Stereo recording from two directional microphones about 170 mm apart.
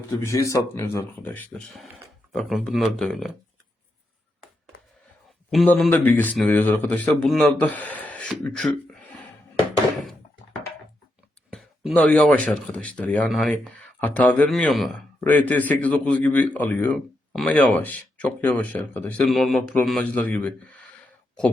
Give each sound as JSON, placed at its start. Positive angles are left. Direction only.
{"t": 0.3, "sound": "a man's voice", "side_deg": 15}
{"t": 5.5, "sound": "a man's voice", "side_deg": 0}
{"t": 5.9, "sound": "a man's voice", "side_deg": 10}
{"t": 11.5, "sound": "a man's voice", "side_deg": 0}